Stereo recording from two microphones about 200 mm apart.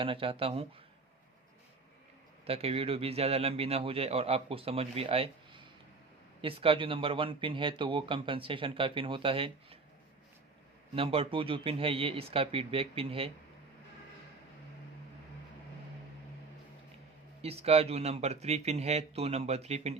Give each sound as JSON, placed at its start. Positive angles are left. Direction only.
{"t": 0.0, "sound": "speech", "side_deg": -25}
{"t": 2.5, "sound": "speech", "side_deg": -30}
{"t": 10.9, "sound": "speech", "side_deg": -30}
{"t": 17.4, "sound": "speech", "side_deg": -30}